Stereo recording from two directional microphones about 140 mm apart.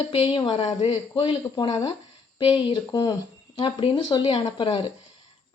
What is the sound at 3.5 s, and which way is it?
Speech, 40° left (ahead or behind).